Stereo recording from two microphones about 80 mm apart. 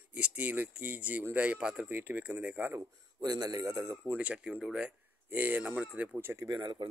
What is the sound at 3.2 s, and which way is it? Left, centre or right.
Speech, right.